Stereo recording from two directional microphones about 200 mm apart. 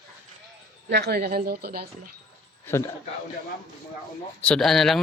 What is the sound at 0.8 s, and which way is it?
A woman's voice, 55° right (ahead or behind).